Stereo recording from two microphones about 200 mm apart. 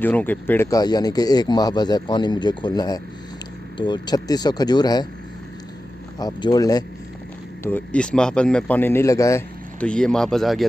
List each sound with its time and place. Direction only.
0.0 s speech: 10° left (ahead or behind)
6.1 s speech: 20° left (ahead or behind)
7.6 s a man's voice: 5° left (ahead or behind)